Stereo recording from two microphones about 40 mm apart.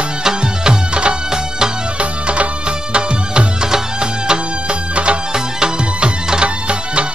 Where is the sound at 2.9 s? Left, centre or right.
Right.